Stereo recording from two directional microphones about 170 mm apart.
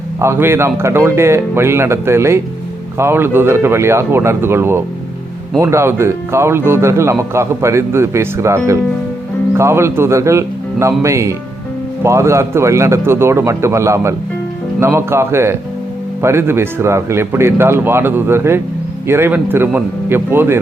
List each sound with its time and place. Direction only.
0.2 s speech: 15° right (ahead or behind)